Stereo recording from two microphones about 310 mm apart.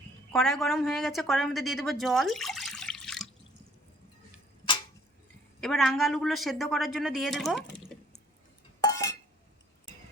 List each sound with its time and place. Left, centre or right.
0.3 s speech: centre
5.5 s speech: centre
8.8 s a sound: centre